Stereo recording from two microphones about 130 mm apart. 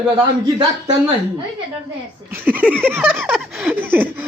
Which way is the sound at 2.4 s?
15° right (ahead or behind).